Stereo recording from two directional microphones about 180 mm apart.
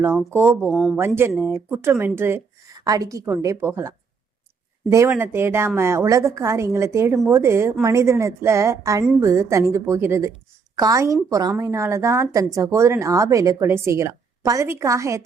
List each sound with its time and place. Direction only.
0.0 s a woman's voice: 10° right (ahead or behind)
0.7 s speech: centre (ahead or behind)
0.9 s a woman's voice: 15° right (ahead or behind)